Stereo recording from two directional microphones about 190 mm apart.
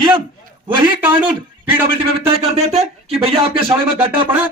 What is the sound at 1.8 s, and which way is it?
Speech, 30° right (ahead or behind).